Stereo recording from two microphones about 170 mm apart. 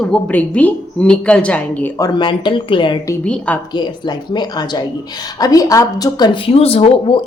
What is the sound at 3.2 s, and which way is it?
Speech, 5° left (ahead or behind).